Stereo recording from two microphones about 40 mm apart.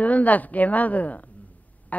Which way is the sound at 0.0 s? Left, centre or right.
Left.